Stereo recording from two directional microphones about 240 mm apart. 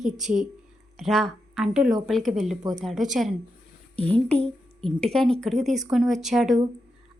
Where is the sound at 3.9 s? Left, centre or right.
Right.